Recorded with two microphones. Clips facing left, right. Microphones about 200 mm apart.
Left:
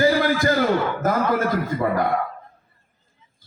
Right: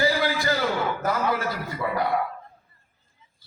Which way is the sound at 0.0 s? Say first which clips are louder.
Left 5 dB; 50° left (ahead or behind).